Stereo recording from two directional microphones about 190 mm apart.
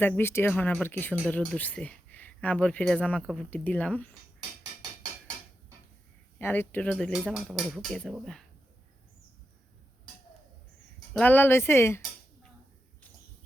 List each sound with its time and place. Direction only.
0.0 s speech: 10° left (ahead or behind)
6.4 s speech: 10° left (ahead or behind)
11.1 s speech: 10° left (ahead or behind)